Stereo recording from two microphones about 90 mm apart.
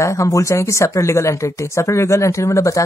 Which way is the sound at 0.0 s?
35° left (ahead or behind).